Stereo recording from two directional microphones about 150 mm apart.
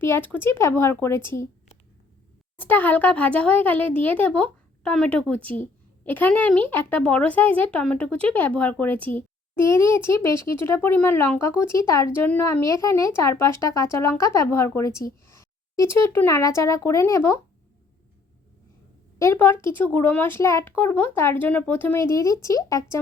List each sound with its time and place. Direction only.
0.0 s speech: 15° left (ahead or behind)
2.6 s speech: 10° left (ahead or behind)
19.2 s speech: 15° left (ahead or behind)